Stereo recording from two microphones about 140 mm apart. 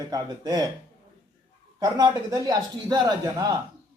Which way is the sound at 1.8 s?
25° right (ahead or behind).